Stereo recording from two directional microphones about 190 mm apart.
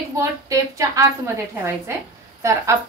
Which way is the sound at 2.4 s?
15° right (ahead or behind).